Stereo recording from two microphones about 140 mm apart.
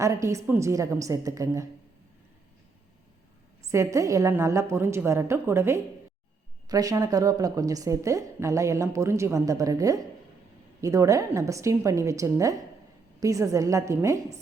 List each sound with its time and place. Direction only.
0.0 s a woman's voice: 20° right (ahead or behind)
3.7 s a woman's voice: 20° right (ahead or behind)